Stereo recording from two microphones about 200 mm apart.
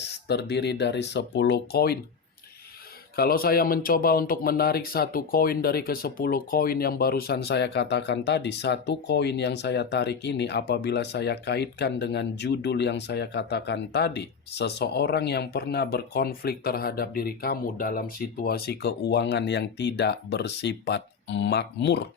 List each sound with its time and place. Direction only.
0.1 s speech: 55° left (ahead or behind)
3.2 s speech: 50° left (ahead or behind)